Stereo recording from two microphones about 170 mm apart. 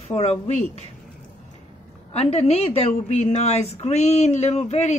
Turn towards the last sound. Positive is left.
turn(degrees=40)  # may be behind; listen again after turning